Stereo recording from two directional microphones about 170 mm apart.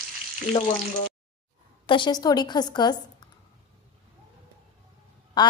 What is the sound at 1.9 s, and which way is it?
A woman's voice, 25° left (ahead or behind).